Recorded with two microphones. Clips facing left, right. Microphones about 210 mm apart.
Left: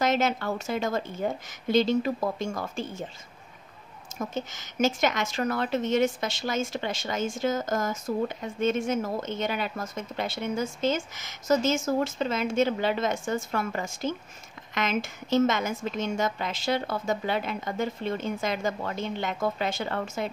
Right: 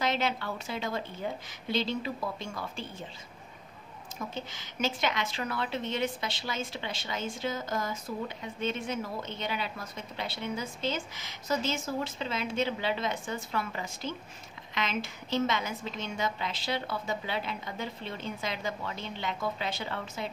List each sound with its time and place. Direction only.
0.0 s a woman's voice: 45° left (ahead or behind)
4.2 s a woman's voice: 45° left (ahead or behind)